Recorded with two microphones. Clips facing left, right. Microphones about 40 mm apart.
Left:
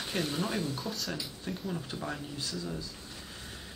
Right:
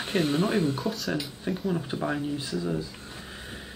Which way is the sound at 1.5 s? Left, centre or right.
Right.